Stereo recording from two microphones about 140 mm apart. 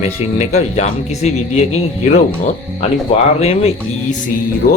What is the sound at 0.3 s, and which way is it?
Speech, 55° left (ahead or behind).